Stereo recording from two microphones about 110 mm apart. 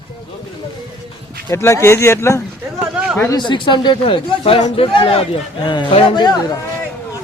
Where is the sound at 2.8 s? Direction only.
10° right (ahead or behind).